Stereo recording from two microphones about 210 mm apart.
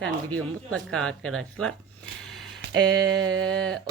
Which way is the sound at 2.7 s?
60° right (ahead or behind).